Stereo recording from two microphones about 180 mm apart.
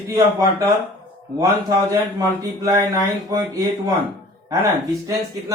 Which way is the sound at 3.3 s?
15° right (ahead or behind).